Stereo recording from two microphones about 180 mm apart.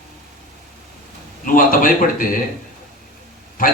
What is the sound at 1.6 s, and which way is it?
Speech, 50° left (ahead or behind).